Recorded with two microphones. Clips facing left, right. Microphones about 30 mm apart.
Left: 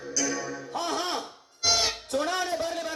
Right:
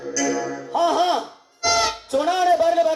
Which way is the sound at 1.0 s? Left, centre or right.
Right.